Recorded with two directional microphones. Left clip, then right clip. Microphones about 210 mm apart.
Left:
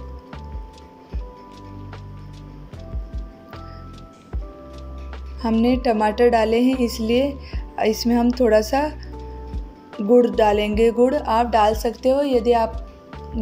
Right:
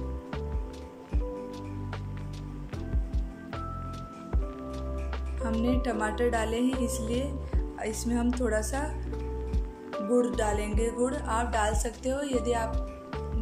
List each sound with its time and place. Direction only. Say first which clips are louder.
5.4 s speech: left 10 dB; 25° left (ahead or behind)
10.1 s speech: left 12 dB; 25° left (ahead or behind)